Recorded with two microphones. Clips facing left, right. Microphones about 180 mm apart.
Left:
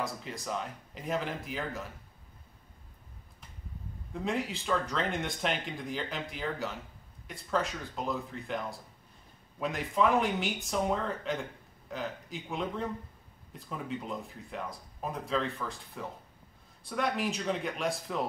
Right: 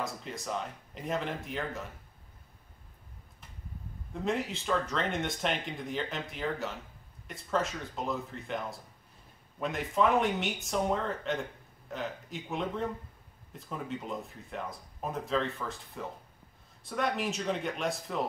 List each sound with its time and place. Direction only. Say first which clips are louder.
0.0 s speech: even; centre (ahead or behind)
4.1 s speech: right 1 dB; centre (ahead or behind)